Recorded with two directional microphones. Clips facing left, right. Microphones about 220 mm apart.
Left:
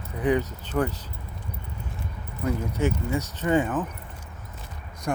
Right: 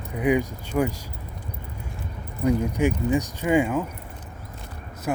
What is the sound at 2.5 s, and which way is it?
Speech, 15° right (ahead or behind).